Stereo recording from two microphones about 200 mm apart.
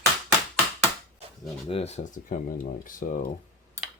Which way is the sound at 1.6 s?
30° left (ahead or behind).